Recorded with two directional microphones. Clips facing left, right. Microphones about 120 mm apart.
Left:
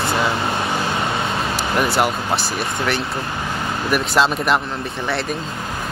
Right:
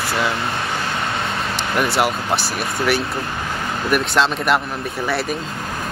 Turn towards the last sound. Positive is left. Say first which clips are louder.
# even
turn(degrees=0)  # may be behind; listen again after turning